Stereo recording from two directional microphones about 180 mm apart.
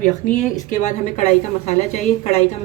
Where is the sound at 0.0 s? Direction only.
45° left (ahead or behind).